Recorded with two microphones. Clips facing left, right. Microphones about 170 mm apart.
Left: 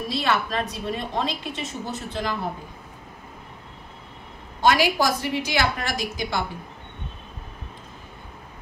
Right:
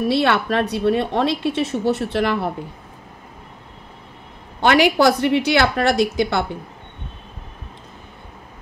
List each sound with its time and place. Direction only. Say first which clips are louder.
0.0 s a woman's voice: right 7 dB; 65° right (ahead or behind)
4.6 s a woman's voice: right 5 dB; 65° right (ahead or behind)